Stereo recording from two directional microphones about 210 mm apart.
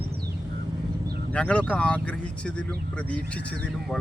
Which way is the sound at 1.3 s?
5° left (ahead or behind).